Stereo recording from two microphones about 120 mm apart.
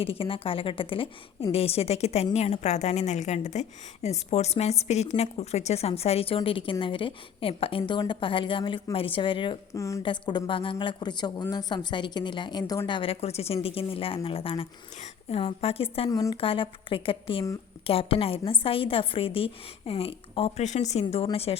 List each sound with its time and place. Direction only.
0.0 s a woman's voice: 50° left (ahead or behind)
9.7 s a woman's voice: 25° left (ahead or behind)
10.0 s a woman's voice: 40° left (ahead or behind)
16.0 s a woman's voice: 30° left (ahead or behind)
16.4 s a woman's voice: 50° left (ahead or behind)
20.7 s a woman's voice: 70° left (ahead or behind)